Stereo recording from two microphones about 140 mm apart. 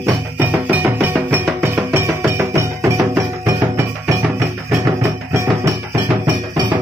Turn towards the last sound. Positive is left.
turn(degrees=-20)  # may be behind; listen again after turning